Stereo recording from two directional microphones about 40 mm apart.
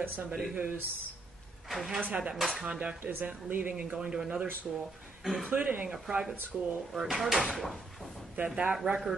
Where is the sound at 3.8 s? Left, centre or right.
Right.